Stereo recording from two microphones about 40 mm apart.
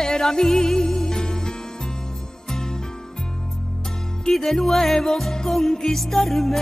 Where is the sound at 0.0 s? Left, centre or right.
Centre.